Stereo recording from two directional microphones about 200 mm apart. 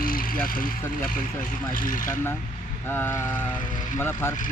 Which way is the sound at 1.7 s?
45° left (ahead or behind).